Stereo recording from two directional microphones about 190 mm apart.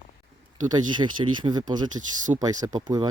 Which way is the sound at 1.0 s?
25° right (ahead or behind).